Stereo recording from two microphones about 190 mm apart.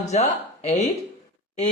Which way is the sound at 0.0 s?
35° left (ahead or behind).